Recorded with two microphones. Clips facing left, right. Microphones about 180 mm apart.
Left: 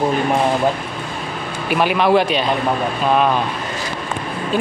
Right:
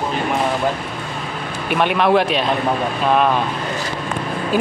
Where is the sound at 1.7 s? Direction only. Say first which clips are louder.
Left 1 dB; centre (ahead or behind).